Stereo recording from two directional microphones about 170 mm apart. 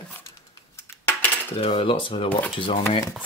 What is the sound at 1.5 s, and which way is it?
Speech, 35° left (ahead or behind).